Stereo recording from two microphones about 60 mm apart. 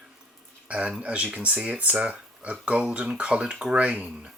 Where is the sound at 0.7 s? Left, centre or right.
Centre.